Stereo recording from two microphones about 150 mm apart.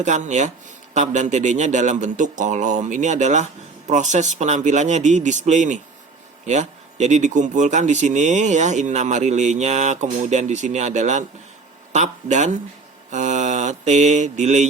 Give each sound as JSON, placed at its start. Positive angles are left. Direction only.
{"t": 0.0, "sound": "speech", "side_deg": -50}
{"t": 13.1, "sound": "mantra", "side_deg": -55}